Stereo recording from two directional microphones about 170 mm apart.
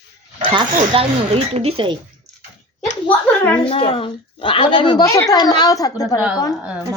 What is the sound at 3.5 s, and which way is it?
A woman's voice, 30° left (ahead or behind).